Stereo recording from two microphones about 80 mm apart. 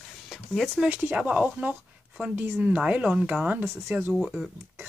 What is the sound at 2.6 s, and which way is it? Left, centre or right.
Speech, centre.